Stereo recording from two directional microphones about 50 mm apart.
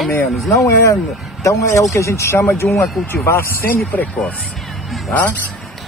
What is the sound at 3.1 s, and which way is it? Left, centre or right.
Speech, left.